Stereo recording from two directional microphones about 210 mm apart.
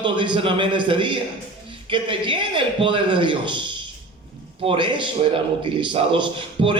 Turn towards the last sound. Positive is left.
turn(degrees=-25)  # may be behind; listen again after turning